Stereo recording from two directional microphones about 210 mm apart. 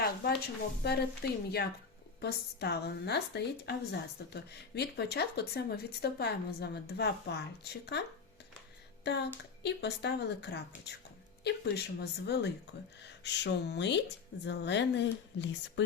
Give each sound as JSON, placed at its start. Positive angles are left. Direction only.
{"t": 0.8, "sound": "a woman's voice", "side_deg": 50}
{"t": 9.0, "sound": "a woman's voice", "side_deg": 55}